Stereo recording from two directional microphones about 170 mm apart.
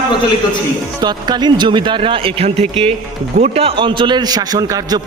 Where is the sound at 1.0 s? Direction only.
25° right (ahead or behind).